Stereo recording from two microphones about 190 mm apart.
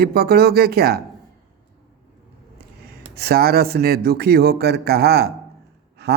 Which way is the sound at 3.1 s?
55° right (ahead or behind).